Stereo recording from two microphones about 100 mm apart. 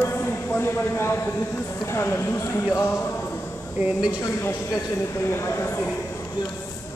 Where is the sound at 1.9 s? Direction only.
25° left (ahead or behind).